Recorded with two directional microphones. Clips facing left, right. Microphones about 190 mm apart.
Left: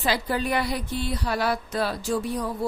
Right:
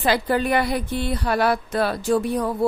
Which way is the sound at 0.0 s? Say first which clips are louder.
Right 5 dB; 55° right (ahead or behind).